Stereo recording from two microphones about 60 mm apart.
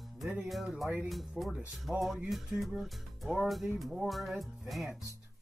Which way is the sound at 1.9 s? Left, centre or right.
Centre.